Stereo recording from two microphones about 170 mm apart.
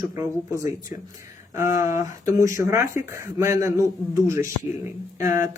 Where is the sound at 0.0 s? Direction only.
15° right (ahead or behind).